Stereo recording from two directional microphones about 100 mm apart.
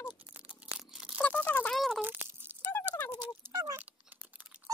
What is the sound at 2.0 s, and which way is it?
Crunch, 20° right (ahead or behind).